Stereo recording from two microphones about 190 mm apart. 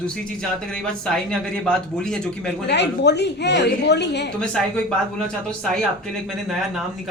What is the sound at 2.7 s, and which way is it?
Speech, 60° left (ahead or behind).